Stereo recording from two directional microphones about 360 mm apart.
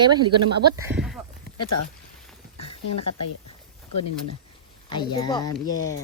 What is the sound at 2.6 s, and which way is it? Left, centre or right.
Speech, left.